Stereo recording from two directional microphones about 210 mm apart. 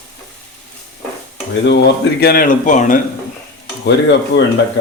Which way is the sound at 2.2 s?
45° left (ahead or behind).